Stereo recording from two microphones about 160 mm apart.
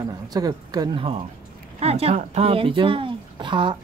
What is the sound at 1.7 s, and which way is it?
Speech, 40° right (ahead or behind).